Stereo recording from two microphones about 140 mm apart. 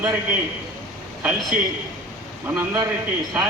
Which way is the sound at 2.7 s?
20° right (ahead or behind).